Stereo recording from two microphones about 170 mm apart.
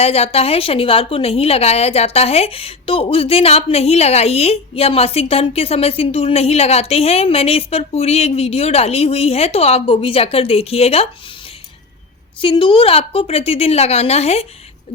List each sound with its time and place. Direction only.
0.0 s a woman's voice: 35° left (ahead or behind)
12.4 s a woman's voice: 30° left (ahead or behind)